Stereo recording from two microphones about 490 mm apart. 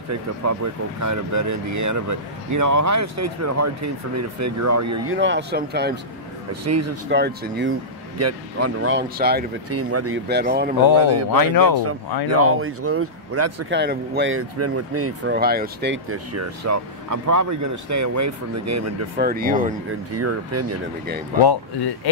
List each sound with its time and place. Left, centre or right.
0.4 s speech: right; by 5.9 s centre
6.6 s speech: right
8.2 s speech: right
11.0 s speech: right
11.3 s speech: left
12.3 s speech: right
19.1 s speech: centre
20.1 s speech: right